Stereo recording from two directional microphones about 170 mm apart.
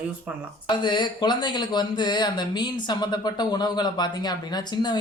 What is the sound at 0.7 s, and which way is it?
Speech, 25° left (ahead or behind).